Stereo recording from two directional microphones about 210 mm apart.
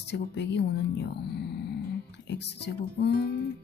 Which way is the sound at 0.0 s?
55° left (ahead or behind).